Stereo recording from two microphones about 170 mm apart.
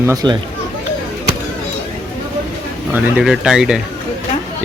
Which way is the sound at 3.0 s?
5° right (ahead or behind).